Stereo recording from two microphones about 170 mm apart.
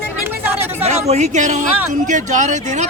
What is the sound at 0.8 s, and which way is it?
A man's voice, 40° right (ahead or behind).